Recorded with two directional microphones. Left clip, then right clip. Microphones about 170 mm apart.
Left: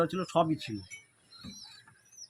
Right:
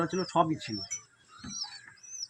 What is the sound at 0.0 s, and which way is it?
Speech, 30° left (ahead or behind).